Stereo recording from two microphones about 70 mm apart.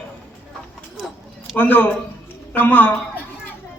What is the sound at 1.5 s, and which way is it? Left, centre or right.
A man's voice, left.